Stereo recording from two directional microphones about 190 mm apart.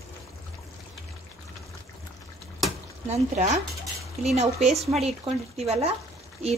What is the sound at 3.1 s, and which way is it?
A woman's voice, 35° right (ahead or behind).